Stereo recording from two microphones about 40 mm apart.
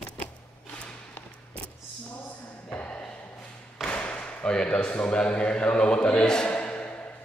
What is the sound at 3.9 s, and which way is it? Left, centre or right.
Thump, left.